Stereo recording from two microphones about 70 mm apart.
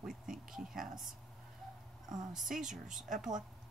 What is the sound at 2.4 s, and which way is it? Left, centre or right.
A woman's voice, centre.